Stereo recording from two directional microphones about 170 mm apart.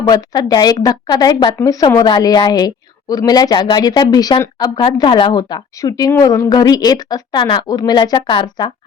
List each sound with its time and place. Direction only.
0.0 s a woman's voice: 25° left (ahead or behind)